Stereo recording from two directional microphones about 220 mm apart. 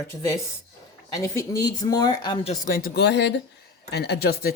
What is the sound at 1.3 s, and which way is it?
Speech, 15° left (ahead or behind).